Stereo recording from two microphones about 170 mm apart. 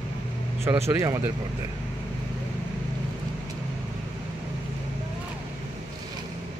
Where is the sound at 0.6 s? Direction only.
15° right (ahead or behind).